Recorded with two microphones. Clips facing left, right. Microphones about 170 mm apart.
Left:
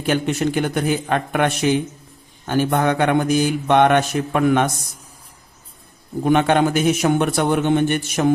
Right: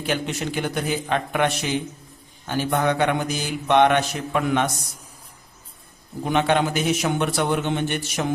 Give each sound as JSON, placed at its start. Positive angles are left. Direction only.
{"t": 0.0, "sound": "mantra", "side_deg": 55}
{"t": 6.2, "sound": "mantra", "side_deg": 50}